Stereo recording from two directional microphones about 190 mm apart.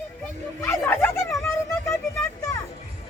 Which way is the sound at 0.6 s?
10° left (ahead or behind).